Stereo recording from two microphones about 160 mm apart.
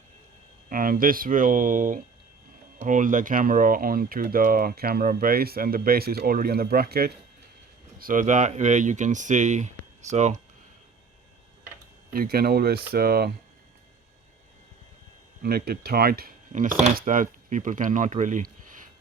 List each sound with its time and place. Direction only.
0.7 s speech: 60° right (ahead or behind)
7.9 s speech: 60° right (ahead or behind)
12.1 s speech: 70° right (ahead or behind)
15.4 s speech: 75° right (ahead or behind)
16.5 s speech: 55° right (ahead or behind)